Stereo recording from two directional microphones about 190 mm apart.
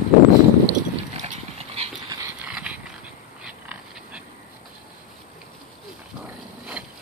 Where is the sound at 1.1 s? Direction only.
35° right (ahead or behind).